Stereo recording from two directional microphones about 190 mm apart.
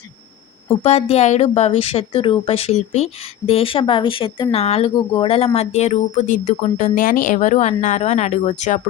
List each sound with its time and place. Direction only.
0.8 s speech: 30° left (ahead or behind)